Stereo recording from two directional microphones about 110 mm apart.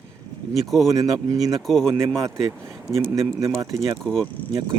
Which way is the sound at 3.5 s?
30° right (ahead or behind).